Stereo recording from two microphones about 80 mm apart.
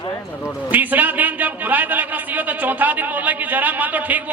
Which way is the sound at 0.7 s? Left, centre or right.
Right.